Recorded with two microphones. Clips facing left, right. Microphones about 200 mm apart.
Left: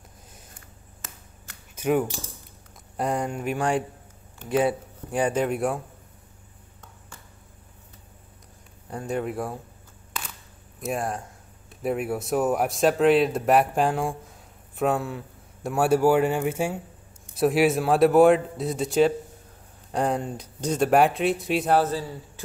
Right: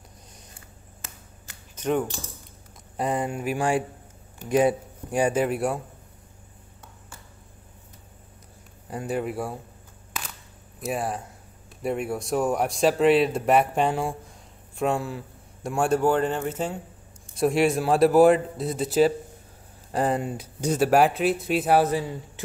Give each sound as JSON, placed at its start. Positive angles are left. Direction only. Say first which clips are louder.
{"t": 1.8, "sound": "a man's voice", "louder": "left 2 dB", "side_deg": 10}
{"t": 8.9, "sound": "speech", "louder": "even", "side_deg": -5}
{"t": 10.8, "sound": "a man's voice", "louder": "even", "side_deg": 0}
{"t": 21.7, "sound": "speech", "louder": "right 2 dB", "side_deg": -15}